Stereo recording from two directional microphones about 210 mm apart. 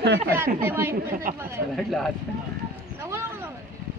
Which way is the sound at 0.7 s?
10° right (ahead or behind).